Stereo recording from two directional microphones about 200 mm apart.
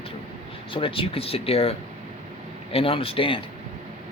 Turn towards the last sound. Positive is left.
turn(degrees=25)  # may be behind; listen again after turning